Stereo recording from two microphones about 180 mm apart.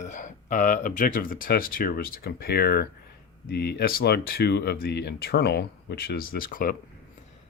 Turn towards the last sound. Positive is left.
turn(degrees=50)  # may be behind; listen again after turning